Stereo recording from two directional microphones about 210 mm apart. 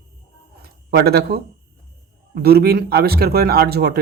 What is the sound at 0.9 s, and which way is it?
Speech, 50° right (ahead or behind).